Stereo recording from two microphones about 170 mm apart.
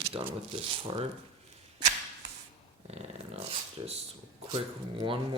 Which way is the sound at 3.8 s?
30° right (ahead or behind).